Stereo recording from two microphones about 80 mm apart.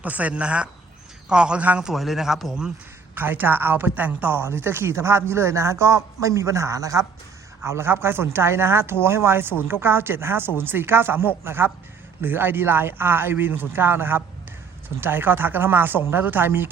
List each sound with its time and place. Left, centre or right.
0.0 s speech: centre
1.9 s a man's voice: centre
3.2 s speech: right
7.7 s speech: right